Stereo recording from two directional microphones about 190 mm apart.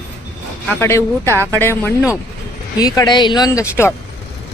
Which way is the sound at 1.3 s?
15° right (ahead or behind).